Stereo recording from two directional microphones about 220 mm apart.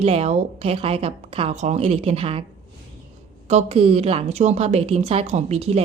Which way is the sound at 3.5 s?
30° right (ahead or behind).